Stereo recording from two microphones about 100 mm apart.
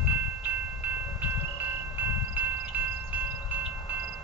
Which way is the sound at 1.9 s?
15° right (ahead or behind).